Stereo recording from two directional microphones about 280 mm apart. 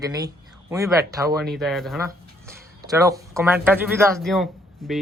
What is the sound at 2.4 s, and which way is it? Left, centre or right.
Speech, centre.